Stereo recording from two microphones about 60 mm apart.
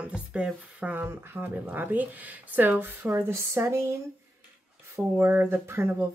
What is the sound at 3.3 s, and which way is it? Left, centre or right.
Speech, right.